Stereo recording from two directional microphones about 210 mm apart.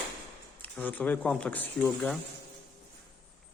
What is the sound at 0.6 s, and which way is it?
Speech, 10° left (ahead or behind).